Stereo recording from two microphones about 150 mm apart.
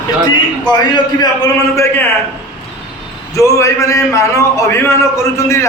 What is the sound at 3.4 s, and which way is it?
A man's voice, 20° left (ahead or behind).